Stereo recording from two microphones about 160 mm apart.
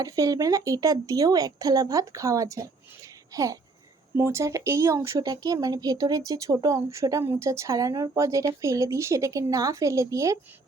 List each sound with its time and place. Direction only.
0.0 s speech: 20° right (ahead or behind)